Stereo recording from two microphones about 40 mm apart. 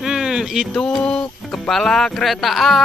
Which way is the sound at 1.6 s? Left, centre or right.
Centre.